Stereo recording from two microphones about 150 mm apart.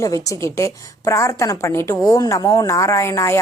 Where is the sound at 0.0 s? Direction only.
20° left (ahead or behind).